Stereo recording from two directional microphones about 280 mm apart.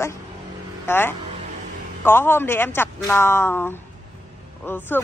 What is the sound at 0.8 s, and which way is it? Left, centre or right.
A man's voice, centre.